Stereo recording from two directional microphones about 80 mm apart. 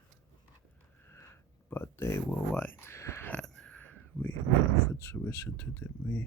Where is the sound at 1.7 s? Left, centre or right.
Left.